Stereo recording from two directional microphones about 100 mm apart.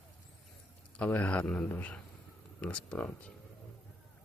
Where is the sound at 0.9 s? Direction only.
15° left (ahead or behind).